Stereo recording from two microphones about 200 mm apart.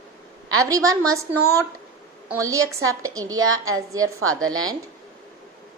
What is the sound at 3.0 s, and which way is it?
Speech, 15° right (ahead or behind).